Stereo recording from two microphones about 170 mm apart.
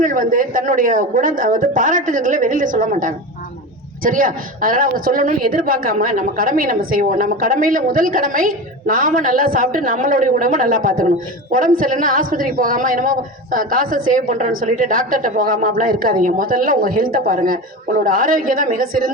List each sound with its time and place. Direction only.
0.0 s a woman's voice: 50° right (ahead or behind)